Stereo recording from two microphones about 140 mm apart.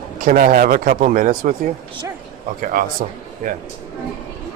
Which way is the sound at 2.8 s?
80° right.